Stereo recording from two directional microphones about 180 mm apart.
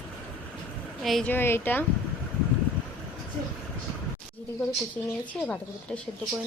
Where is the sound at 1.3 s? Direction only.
10° left (ahead or behind).